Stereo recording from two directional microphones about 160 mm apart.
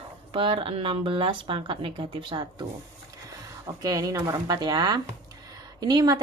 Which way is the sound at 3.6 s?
25° right (ahead or behind).